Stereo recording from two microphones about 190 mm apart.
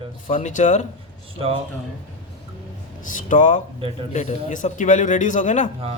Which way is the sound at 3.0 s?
45° left (ahead or behind).